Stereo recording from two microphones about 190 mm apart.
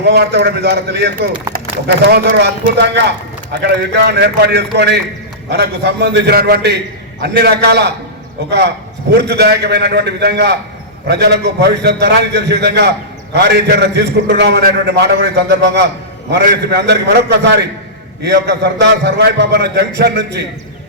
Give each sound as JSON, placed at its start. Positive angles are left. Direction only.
{"t": 0.0, "sound": "a man's voice", "side_deg": -60}
{"t": 2.7, "sound": "a man's voice", "side_deg": -65}